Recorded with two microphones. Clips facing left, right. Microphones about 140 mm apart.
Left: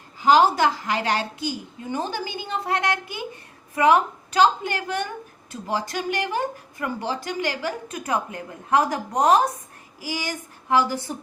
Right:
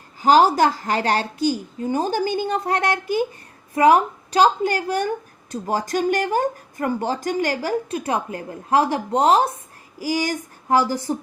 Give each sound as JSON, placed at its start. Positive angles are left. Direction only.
{"t": 0.2, "sound": "a woman's voice", "side_deg": -45}
{"t": 10.0, "sound": "a woman's voice", "side_deg": -40}